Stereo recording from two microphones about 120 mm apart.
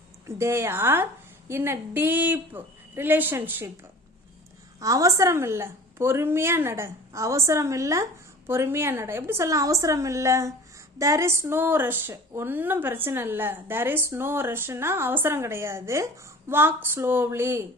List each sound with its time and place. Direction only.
0.3 s a woman's voice: 25° right (ahead or behind)
4.8 s a woman's voice: 30° right (ahead or behind)